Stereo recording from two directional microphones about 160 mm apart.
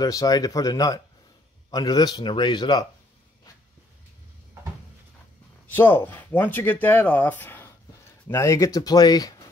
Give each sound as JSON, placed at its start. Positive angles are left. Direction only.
{"t": 0.0, "sound": "speech", "side_deg": 20}
{"t": 5.7, "sound": "speech", "side_deg": 15}